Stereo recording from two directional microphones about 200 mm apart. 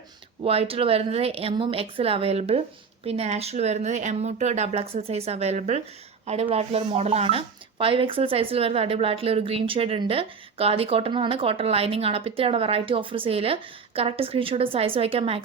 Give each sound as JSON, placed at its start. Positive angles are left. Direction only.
{"t": 0.4, "sound": "speech", "side_deg": -30}